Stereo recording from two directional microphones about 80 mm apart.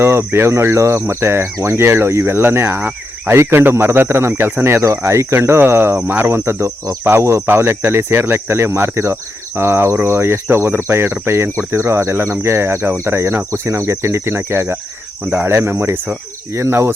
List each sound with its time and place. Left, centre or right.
0.0 s speech: right